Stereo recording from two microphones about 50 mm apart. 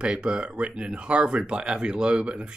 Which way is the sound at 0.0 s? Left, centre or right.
Centre.